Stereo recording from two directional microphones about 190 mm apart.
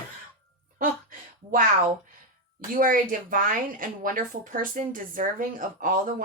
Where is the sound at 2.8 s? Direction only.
45° right (ahead or behind).